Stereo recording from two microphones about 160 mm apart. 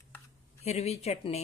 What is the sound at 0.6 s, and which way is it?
Speech, 40° left (ahead or behind).